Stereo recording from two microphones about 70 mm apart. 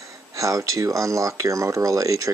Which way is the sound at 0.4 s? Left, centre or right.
Right.